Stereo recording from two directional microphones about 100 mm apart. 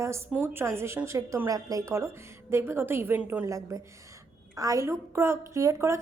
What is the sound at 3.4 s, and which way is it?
A woman's voice, 35° right (ahead or behind).